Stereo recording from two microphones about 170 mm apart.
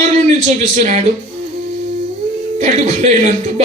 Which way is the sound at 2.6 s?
45° right (ahead or behind).